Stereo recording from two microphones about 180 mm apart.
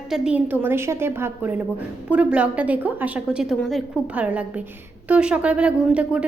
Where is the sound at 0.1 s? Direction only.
5° right (ahead or behind).